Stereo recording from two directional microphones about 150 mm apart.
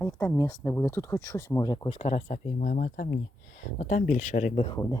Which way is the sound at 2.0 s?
50° left (ahead or behind).